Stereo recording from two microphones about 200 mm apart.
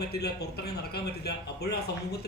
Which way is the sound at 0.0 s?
55° left (ahead or behind).